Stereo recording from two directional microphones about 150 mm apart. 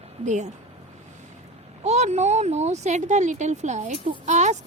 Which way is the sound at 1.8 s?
50° right (ahead or behind).